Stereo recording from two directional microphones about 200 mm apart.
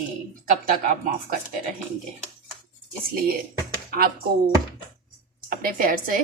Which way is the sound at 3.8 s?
50° right (ahead or behind).